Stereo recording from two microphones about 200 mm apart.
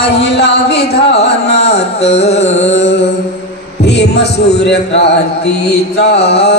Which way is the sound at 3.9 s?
60° left (ahead or behind).